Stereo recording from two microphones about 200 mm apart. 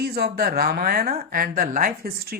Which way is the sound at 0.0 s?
50° right (ahead or behind).